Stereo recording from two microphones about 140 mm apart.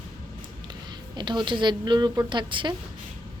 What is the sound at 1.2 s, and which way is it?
A woman's voice, 35° right (ahead or behind).